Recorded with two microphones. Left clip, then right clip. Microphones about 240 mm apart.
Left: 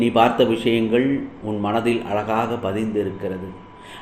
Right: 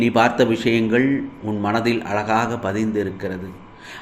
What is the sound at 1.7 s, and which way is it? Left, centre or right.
Speech, right.